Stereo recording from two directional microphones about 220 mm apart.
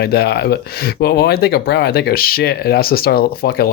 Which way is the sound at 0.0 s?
45° left (ahead or behind).